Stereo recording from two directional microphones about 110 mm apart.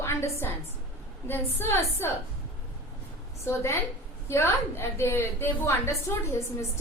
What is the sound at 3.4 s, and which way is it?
A woman's voice, 25° left (ahead or behind).